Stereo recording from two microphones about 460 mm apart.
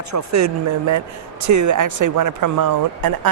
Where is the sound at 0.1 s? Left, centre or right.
Right.